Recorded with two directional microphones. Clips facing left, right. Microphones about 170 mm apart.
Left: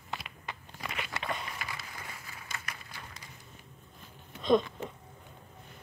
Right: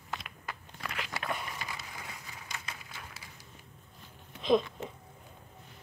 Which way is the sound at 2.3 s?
15° right (ahead or behind).